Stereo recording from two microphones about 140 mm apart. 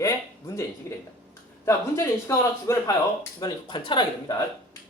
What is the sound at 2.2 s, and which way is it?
Speech, 20° left (ahead or behind).